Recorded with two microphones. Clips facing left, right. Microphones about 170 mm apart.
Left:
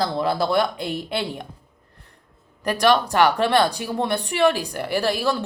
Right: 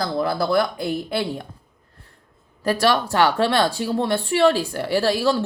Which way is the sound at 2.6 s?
15° left (ahead or behind).